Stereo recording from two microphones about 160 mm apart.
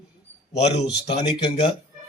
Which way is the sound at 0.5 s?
45° left (ahead or behind).